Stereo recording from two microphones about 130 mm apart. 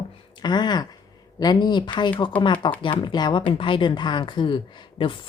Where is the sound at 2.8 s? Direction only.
40° left (ahead or behind).